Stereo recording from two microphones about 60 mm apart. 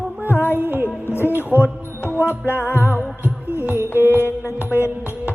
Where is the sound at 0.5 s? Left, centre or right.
Right.